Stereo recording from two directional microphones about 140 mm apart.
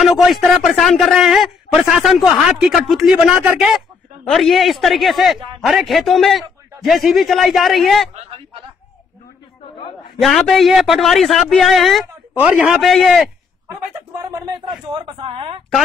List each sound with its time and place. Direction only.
0.0 s a man's voice: centre (ahead or behind)
10.2 s a man's voice: centre (ahead or behind)
12.4 s a man's voice: 10° right (ahead or behind)
12.8 s a man's voice: centre (ahead or behind)
14.4 s speech: 30° right (ahead or behind)